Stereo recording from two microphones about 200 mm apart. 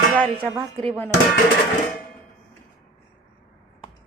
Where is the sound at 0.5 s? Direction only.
30° right (ahead or behind).